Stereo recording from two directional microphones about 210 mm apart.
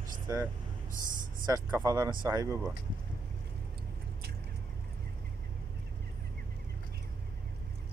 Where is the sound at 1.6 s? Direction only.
10° right (ahead or behind).